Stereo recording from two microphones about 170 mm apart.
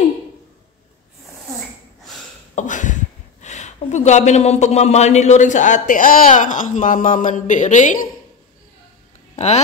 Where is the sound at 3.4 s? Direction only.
45° left (ahead or behind).